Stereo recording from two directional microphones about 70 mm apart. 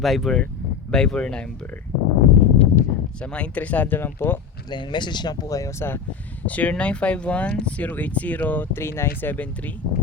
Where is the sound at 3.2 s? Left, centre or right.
Centre.